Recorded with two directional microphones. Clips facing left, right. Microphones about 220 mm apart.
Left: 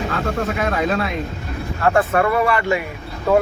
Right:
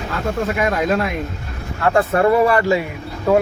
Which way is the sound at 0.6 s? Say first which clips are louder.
Right 3 dB; 5° right (ahead or behind).